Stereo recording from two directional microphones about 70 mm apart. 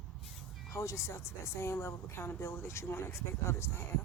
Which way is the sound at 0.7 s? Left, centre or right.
Left.